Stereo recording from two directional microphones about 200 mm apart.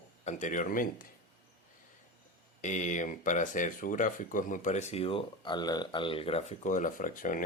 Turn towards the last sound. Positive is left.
turn(degrees=40)  # may be behind; listen again after turning